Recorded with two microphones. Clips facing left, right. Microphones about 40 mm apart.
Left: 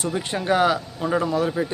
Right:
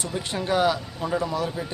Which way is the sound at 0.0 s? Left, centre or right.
Centre.